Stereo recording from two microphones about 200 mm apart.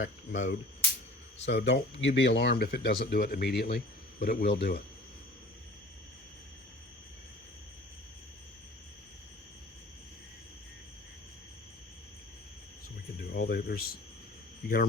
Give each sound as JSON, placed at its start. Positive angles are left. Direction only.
{"t": 0.0, "sound": "speech", "side_deg": 65}
{"t": 13.3, "sound": "speech", "side_deg": 50}